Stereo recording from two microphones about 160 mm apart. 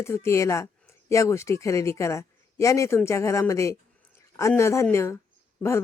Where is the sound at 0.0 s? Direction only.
15° left (ahead or behind).